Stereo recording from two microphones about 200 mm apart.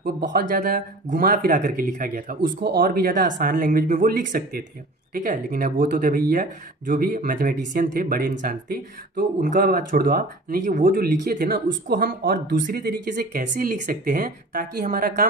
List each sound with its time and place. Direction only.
0.0 s speech: 45° right (ahead or behind)